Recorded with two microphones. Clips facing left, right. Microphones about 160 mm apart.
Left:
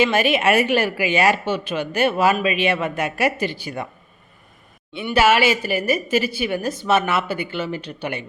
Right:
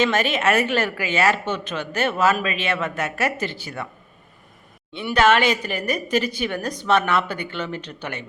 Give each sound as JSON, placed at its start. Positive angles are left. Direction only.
{"t": 0.0, "sound": "speech", "side_deg": 10}
{"t": 5.1, "sound": "speech", "side_deg": 10}